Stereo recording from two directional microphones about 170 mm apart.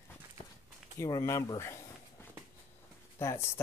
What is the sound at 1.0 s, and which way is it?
Speech, 15° left (ahead or behind).